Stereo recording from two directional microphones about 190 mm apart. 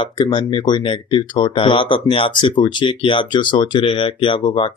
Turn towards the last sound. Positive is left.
turn(degrees=25)  # may be behind; listen again after turning